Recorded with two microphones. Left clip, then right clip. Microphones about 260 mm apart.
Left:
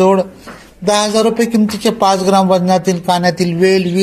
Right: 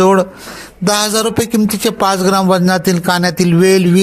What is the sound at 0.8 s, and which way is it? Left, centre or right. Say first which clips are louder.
A man's voice: left 2 dB; right.